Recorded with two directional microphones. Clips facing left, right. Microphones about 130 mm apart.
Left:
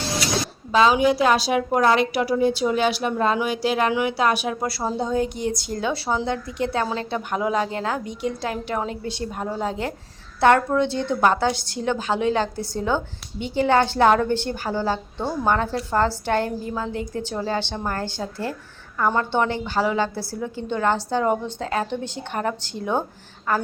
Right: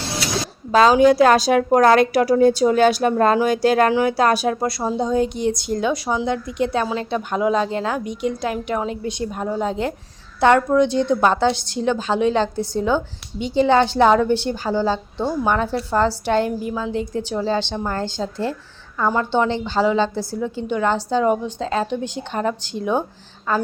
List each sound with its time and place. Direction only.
0.7 s a woman's voice: 40° right (ahead or behind)
4.8 s a woman's voice: 15° right (ahead or behind)